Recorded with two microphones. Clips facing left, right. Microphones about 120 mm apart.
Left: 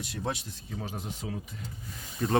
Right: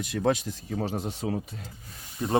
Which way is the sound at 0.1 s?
90° right.